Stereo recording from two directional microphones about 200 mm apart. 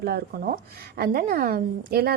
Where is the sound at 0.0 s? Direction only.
50° right (ahead or behind).